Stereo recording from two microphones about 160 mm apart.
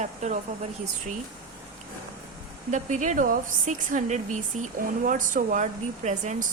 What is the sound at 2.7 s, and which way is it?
A woman's voice, 50° right (ahead or behind).